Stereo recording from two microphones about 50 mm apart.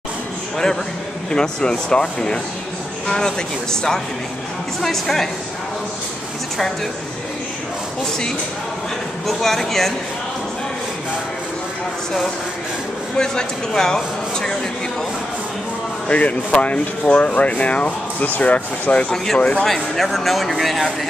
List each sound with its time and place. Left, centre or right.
1.3 s speech: centre
9.4 s speech: centre
13.2 s speech: centre
16.1 s speech: left
19.0 s speech: centre